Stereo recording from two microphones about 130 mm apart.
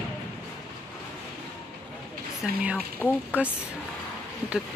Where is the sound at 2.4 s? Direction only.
10° right (ahead or behind).